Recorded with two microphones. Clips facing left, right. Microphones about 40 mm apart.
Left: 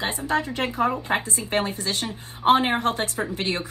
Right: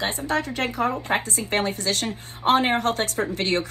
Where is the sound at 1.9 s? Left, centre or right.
Right.